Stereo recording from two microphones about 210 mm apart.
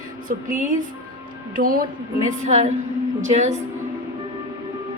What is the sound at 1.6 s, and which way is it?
A woman's voice, 40° right (ahead or behind).